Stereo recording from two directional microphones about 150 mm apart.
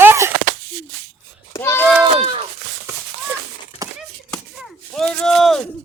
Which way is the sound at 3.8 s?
25° right (ahead or behind).